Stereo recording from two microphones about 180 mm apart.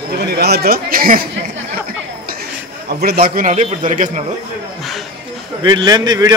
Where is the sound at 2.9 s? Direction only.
60° right (ahead or behind).